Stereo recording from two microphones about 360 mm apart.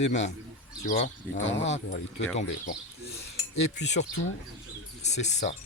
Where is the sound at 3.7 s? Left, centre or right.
Left.